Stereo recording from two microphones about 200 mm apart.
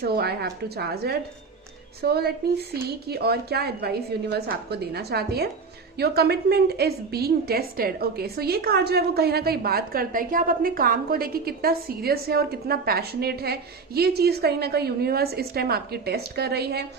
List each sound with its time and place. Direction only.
0.0 s a woman's voice: 55° right (ahead or behind)